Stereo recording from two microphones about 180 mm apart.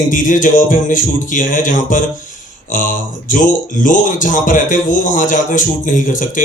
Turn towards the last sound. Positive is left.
turn(degrees=45)  # may be behind; listen again after turning